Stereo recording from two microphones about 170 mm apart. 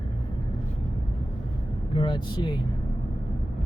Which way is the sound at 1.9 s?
30° left (ahead or behind).